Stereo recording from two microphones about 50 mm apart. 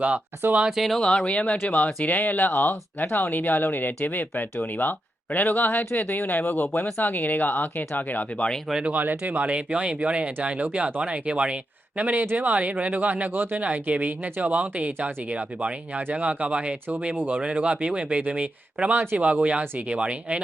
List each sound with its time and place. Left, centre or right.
0.0 s speech: right
0.9 s speech: centre
8.9 s speech: right
12.2 s speech: right
12.5 s speech: right
13.3 s speech: right
13.6 s speech: right